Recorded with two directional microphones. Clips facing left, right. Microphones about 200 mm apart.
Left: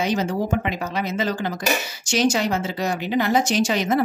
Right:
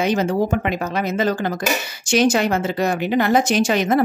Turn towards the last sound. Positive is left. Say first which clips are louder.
# right 3 dB
turn(degrees=-55)  # may be behind; listen again after turning